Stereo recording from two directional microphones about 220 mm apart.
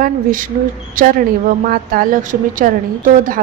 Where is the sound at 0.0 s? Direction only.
40° right (ahead or behind).